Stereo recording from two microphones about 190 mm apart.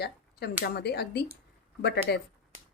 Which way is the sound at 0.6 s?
60° left (ahead or behind).